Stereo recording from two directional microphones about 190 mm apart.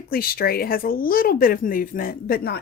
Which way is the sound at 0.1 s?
50° left (ahead or behind).